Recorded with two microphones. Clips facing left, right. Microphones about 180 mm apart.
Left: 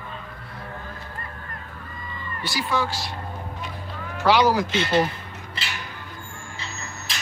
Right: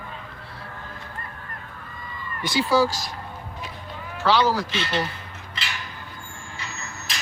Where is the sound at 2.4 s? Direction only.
20° right (ahead or behind).